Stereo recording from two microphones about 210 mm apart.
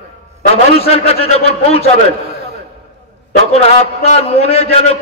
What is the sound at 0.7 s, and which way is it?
A man's voice, 30° left (ahead or behind).